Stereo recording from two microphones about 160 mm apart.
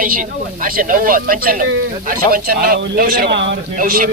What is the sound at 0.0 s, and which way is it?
A man's voice, 55° right (ahead or behind).